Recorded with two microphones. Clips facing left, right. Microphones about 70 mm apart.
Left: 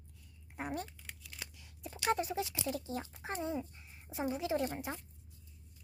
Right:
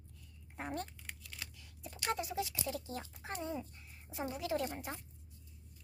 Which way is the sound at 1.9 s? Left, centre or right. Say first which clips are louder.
Left 4 dB; left.